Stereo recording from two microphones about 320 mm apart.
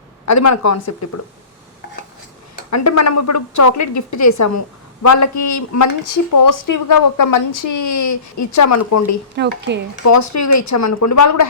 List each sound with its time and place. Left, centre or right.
0.3 s speech: left
2.6 s speech: left
9.3 s speech: right
10.0 s speech: left